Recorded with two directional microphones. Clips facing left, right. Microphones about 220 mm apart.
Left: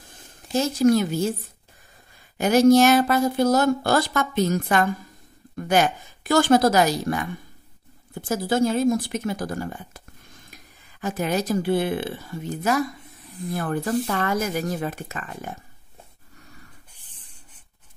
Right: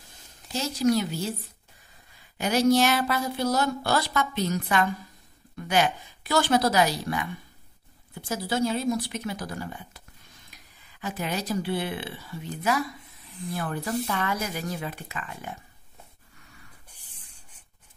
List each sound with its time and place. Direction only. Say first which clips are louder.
0.5 s speech: left 6 dB; 50° left (ahead or behind)
2.3 s speech: left 6 dB; 45° left (ahead or behind)